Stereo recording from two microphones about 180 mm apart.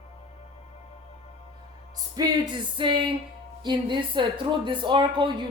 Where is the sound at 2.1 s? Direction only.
25° right (ahead or behind).